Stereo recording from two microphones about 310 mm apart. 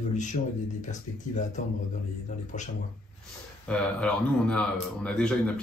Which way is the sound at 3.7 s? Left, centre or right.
Centre.